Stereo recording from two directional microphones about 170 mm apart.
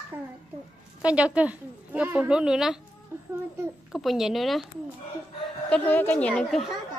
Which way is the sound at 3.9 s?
Centre (ahead or behind).